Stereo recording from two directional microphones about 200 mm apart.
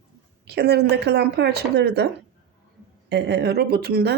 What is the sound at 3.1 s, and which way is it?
Speech, 55° right (ahead or behind).